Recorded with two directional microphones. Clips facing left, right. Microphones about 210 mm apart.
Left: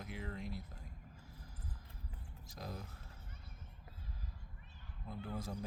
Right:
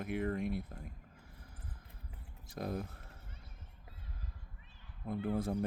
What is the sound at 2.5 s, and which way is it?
Speech, 60° right (ahead or behind).